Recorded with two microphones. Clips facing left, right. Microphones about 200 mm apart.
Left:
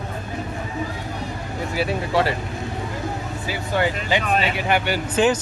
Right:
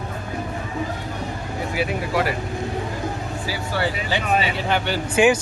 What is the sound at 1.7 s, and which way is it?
Speech, 30° left (ahead or behind).